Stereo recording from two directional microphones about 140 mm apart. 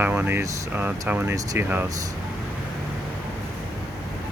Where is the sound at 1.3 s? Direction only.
25° right (ahead or behind).